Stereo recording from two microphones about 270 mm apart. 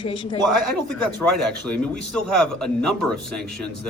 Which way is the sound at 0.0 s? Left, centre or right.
Centre.